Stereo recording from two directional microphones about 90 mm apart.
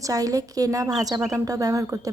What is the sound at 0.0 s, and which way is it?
Speech, 40° right (ahead or behind).